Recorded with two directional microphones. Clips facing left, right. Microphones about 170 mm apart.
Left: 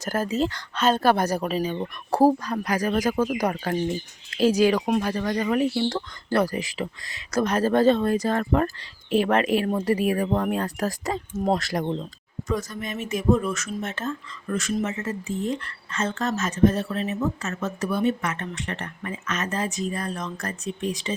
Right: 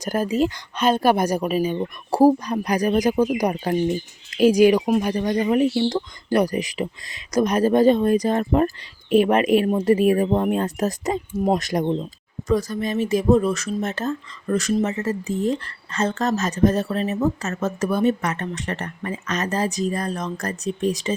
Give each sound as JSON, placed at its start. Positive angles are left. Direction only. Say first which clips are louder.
{"t": 0.0, "sound": "speech", "louder": "right 4 dB", "side_deg": -15}
{"t": 12.5, "sound": "speech", "louder": "right 7 dB", "side_deg": -35}